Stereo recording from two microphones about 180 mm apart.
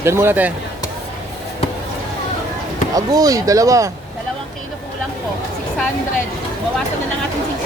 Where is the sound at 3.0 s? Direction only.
20° right (ahead or behind).